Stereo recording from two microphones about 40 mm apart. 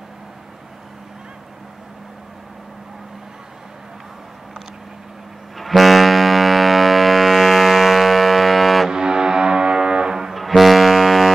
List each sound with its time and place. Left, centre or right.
5.6 s music: centre
8.9 s music: centre
10.3 s music: centre